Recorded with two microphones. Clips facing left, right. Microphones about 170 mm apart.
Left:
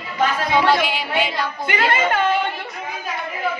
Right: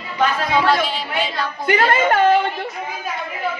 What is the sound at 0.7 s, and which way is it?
Chatter, 10° left (ahead or behind).